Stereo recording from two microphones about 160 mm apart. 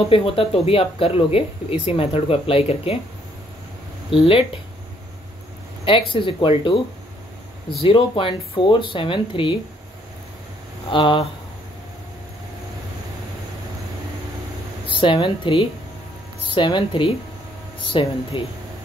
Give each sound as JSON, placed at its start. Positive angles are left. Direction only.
{"t": 0.1, "sound": "speech", "side_deg": 35}
{"t": 4.1, "sound": "speech", "side_deg": 35}
{"t": 5.9, "sound": "speech", "side_deg": 35}
{"t": 7.8, "sound": "speech", "side_deg": 30}
{"t": 10.9, "sound": "speech", "side_deg": 30}
{"t": 15.0, "sound": "speech", "side_deg": 30}